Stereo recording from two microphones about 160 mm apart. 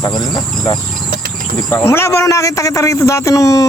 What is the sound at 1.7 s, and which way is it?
A man's voice, 15° left (ahead or behind).